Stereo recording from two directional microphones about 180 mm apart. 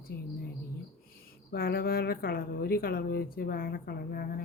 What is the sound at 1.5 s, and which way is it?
Speech, 60° left (ahead or behind).